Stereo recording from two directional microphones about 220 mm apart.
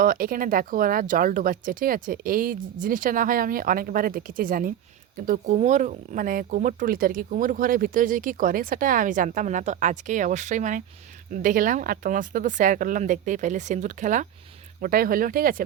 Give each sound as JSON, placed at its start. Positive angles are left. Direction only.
{"t": 0.0, "sound": "speech", "side_deg": -40}